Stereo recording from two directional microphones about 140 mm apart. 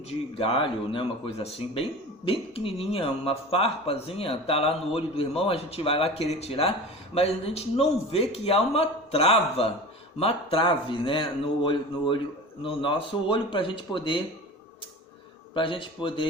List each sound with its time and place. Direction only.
0.1 s speech: 40° left (ahead or behind)
15.5 s speech: 35° left (ahead or behind)